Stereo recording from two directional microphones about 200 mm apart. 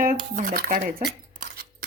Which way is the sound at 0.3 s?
40° right (ahead or behind).